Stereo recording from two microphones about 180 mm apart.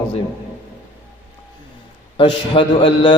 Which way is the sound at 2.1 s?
25° left (ahead or behind).